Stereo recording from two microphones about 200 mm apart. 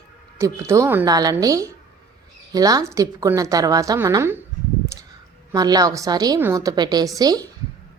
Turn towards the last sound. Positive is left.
turn(degrees=-20)  # may be behind; listen again after turning